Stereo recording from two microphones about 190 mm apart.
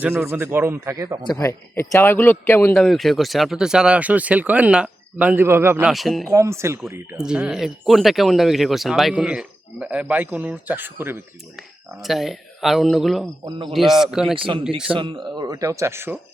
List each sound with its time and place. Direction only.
0.0 s speech: 10° right (ahead or behind)
1.3 s a man's voice: 15° left (ahead or behind)
2.7 s speech: centre (ahead or behind)
5.9 s speech: centre (ahead or behind)
6.2 s speech: 15° right (ahead or behind)
11.9 s speech: centre (ahead or behind)
14.3 s speech: 25° right (ahead or behind); by 16.2 s 10° right (ahead or behind)